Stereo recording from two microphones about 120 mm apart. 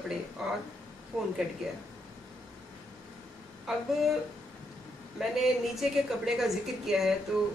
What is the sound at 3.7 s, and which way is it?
Speech, centre (ahead or behind).